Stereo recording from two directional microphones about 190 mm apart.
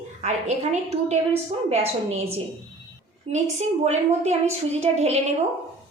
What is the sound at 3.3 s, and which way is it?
A woman's voice, 35° right (ahead or behind).